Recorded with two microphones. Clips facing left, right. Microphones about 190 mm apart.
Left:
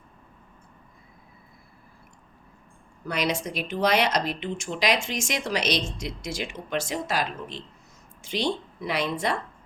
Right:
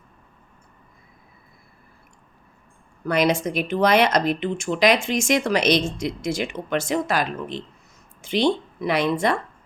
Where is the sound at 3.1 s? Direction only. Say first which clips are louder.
Right 7 dB; 50° right (ahead or behind).